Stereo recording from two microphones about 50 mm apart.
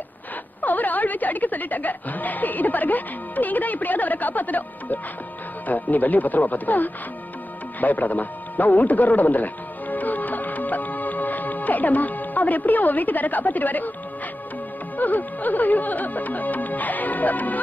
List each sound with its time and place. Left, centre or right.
0.6 s speech: left
7.8 s music: left
15.0 s speech: left